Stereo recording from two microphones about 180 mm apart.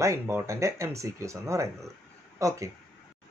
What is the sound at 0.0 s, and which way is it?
Speech, 15° right (ahead or behind).